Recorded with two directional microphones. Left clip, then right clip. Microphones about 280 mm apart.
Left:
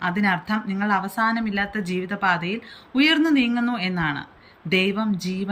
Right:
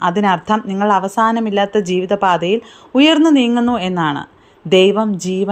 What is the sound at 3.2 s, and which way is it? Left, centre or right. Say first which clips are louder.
Speech: right 8 dB; centre.